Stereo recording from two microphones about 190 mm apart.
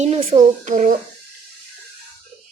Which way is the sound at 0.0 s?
35° right (ahead or behind).